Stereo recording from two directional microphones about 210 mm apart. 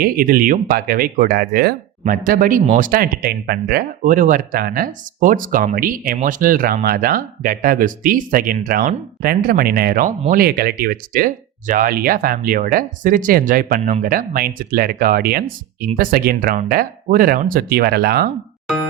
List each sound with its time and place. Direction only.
0.0 s speech: 45° right (ahead or behind)